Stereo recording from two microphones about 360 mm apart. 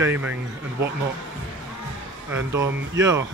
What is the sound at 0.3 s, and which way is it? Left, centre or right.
Speech, right.